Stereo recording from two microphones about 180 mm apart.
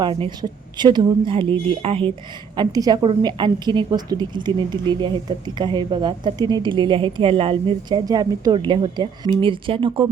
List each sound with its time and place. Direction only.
0.0 s a woman's voice: 25° right (ahead or behind)